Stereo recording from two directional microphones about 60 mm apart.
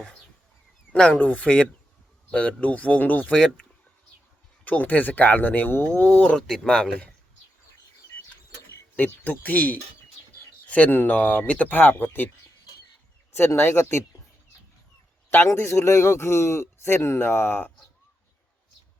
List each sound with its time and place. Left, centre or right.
0.9 s speech: centre
4.6 s speech: left
6.0 s speech: left
9.0 s speech: left
13.6 s speech: left
15.5 s speech: left